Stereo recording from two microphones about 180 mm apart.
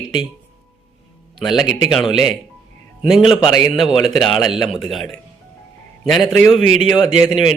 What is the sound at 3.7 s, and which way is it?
A man's voice, centre (ahead or behind).